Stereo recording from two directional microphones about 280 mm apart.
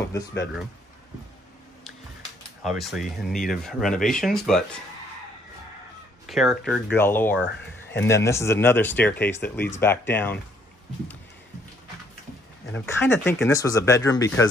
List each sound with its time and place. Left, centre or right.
0.0 s speech: centre
2.6 s speech: centre
6.2 s speech: centre
12.7 s speech: centre